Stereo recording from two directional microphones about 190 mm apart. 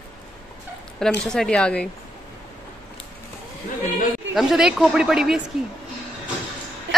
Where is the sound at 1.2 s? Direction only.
5° left (ahead or behind).